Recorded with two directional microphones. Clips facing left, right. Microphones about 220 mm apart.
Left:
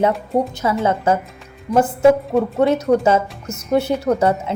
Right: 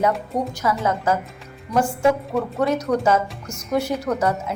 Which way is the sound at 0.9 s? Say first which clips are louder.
Left 4 dB; 25° left (ahead or behind).